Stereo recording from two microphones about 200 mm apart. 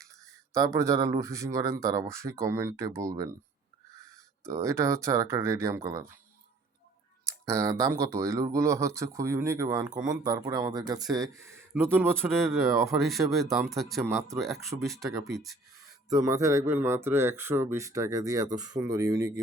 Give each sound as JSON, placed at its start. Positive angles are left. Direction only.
{"t": 0.0, "sound": "speech", "side_deg": -15}
{"t": 4.4, "sound": "speech", "side_deg": -15}
{"t": 7.4, "sound": "speech", "side_deg": -15}
{"t": 12.3, "sound": "speech", "side_deg": 0}
{"t": 12.7, "sound": "speech", "side_deg": -15}
{"t": 13.0, "sound": "speech", "side_deg": 0}
{"t": 14.0, "sound": "speech", "side_deg": -15}
{"t": 14.8, "sound": "speech", "side_deg": 0}
{"t": 15.0, "sound": "speech", "side_deg": -15}
{"t": 15.3, "sound": "speech", "side_deg": 0}
{"t": 16.0, "sound": "speech", "side_deg": -15}